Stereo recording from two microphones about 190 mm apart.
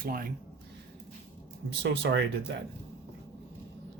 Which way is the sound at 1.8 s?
65° right (ahead or behind).